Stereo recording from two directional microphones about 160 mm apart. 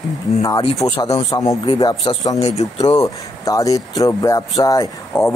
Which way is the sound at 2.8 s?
25° left (ahead or behind).